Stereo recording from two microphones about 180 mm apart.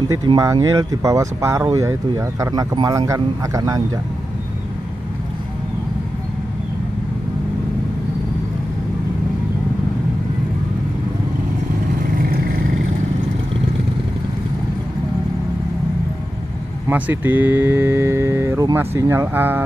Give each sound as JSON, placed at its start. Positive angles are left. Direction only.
{"t": 0.1, "sound": "speech", "side_deg": -20}
{"t": 12.2, "sound": "vehicle", "side_deg": -55}
{"t": 16.9, "sound": "speech", "side_deg": -10}